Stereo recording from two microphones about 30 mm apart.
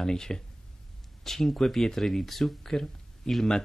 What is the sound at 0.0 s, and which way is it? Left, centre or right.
Speech, left.